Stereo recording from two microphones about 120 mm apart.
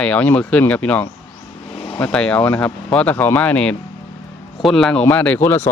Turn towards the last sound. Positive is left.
turn(degrees=20)  # may be behind; listen again after turning